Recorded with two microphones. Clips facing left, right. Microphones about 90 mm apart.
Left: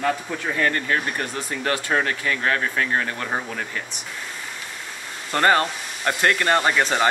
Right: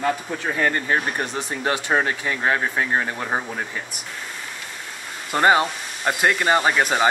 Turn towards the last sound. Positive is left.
turn(degrees=-10)  # may be behind; listen again after turning